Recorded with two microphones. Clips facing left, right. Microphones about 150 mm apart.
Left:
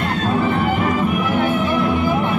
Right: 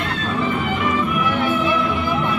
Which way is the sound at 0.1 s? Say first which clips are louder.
Left 5 dB; 45° left (ahead or behind).